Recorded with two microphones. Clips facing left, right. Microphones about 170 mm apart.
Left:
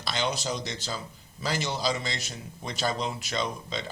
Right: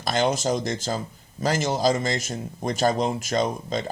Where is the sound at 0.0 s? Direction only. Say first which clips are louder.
Right 7 dB; 45° right (ahead or behind).